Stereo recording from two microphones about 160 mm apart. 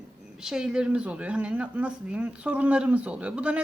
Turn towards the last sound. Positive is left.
turn(degrees=-10)  # may be behind; listen again after turning